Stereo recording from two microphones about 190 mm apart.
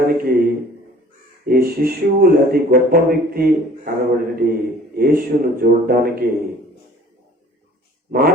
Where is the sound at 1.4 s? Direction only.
50° right (ahead or behind).